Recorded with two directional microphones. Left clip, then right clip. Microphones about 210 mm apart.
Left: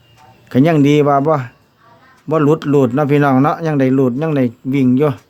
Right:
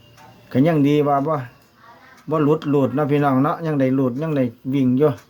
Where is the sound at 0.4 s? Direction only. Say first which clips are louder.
Left 5 dB; 40° left (ahead or behind).